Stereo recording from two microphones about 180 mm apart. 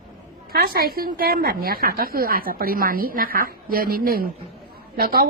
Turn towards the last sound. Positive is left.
turn(degrees=-55)  # may be behind; listen again after turning